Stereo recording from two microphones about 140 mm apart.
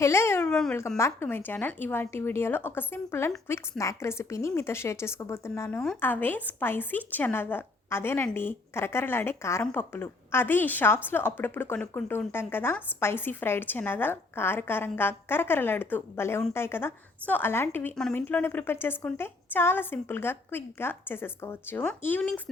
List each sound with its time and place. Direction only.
0.0 s speech: 20° left (ahead or behind)
0.4 s speech: 5° left (ahead or behind)
0.9 s a woman's voice: 20° left (ahead or behind)